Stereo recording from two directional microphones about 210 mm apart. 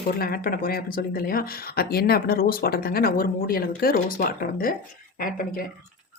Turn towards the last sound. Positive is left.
turn(degrees=40)  # may be behind; listen again after turning